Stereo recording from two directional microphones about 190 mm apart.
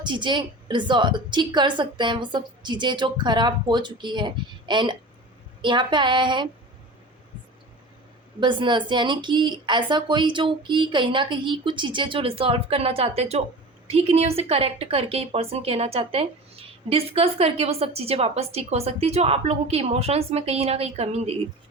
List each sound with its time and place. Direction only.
0.0 s speech: 25° right (ahead or behind)
8.4 s a woman's voice: 25° right (ahead or behind)